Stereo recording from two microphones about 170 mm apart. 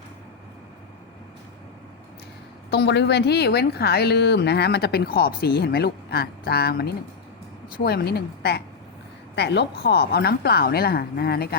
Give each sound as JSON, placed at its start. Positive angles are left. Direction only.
{"t": 2.6, "sound": "a woman's voice", "side_deg": 80}
{"t": 9.3, "sound": "a woman's voice", "side_deg": 80}